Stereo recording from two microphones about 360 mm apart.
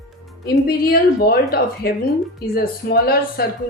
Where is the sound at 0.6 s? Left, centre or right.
Left.